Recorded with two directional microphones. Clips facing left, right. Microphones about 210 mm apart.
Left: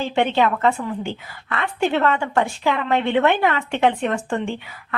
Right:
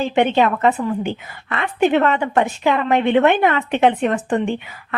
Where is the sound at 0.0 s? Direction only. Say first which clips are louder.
Right 3 dB; 20° right (ahead or behind).